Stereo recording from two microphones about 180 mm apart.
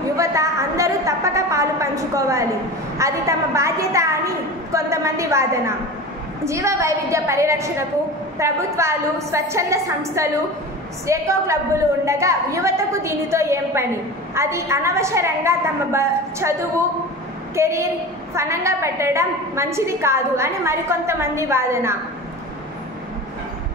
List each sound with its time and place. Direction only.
0.2 s a sound: 15° right (ahead or behind)
3.0 s a woman's voice: 15° right (ahead or behind)
17.6 s a woman's voice: 15° right (ahead or behind)